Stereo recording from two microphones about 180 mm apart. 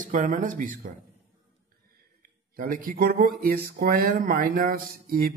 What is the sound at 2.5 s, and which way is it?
Speech, 50° right (ahead or behind).